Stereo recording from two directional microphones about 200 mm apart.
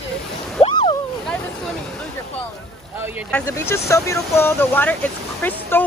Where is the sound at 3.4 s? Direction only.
15° left (ahead or behind).